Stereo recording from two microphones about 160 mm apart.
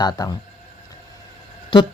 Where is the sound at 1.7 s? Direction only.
35° left (ahead or behind).